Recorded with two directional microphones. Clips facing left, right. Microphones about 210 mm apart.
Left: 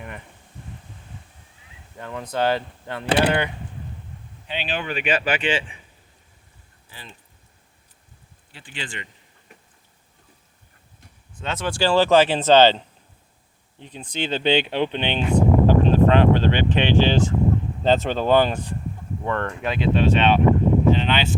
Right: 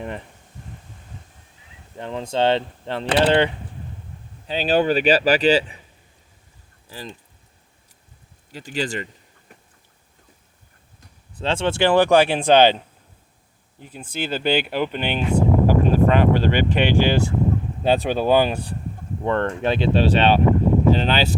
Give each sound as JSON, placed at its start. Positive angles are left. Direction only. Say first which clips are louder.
{"t": 2.0, "sound": "speech", "louder": "right 3 dB", "side_deg": -25}
{"t": 4.4, "sound": "speech", "louder": "right 10 dB", "side_deg": -40}
{"t": 8.5, "sound": "speech", "louder": "right 10 dB", "side_deg": -40}
{"t": 11.3, "sound": "speech", "louder": "right 4 dB", "side_deg": -30}
{"t": 19.2, "sound": "speech", "louder": "right 5 dB", "side_deg": -25}